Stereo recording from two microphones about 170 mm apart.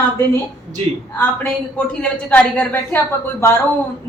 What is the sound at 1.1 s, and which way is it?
A woman's voice, 10° left (ahead or behind).